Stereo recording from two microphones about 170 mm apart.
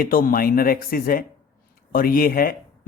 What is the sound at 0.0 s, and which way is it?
Speech, 60° left (ahead or behind).